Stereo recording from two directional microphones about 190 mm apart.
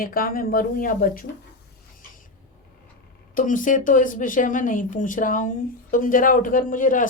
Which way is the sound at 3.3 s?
45° left (ahead or behind).